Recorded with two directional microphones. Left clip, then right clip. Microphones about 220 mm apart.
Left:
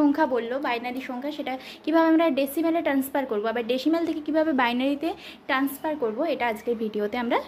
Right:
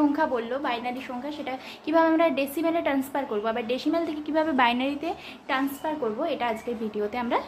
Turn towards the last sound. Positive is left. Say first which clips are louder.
# left 1 dB
turn(degrees=35)  # may be behind; listen again after turning